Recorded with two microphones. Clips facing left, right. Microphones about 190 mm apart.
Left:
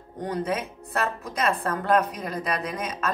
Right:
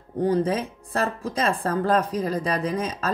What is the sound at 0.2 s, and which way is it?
Speech, 30° right (ahead or behind).